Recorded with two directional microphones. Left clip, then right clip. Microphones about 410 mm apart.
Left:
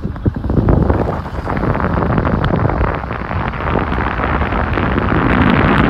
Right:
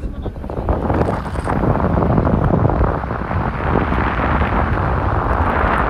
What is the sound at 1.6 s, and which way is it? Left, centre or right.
Eruption, centre.